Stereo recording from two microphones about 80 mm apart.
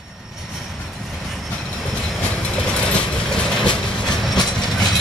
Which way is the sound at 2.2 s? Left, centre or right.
Centre.